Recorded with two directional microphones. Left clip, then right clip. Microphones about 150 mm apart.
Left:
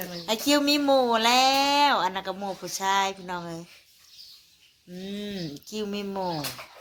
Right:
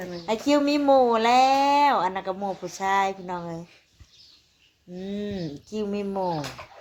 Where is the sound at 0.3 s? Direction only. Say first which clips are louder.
Right 1 dB; 10° right (ahead or behind).